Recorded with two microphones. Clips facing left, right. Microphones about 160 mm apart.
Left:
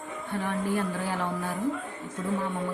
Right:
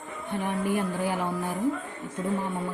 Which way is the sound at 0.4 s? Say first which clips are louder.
Right 1 dB; 15° right (ahead or behind).